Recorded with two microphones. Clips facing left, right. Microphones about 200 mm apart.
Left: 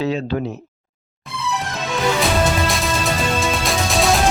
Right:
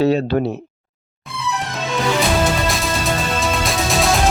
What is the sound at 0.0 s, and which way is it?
Speech, 65° right (ahead or behind).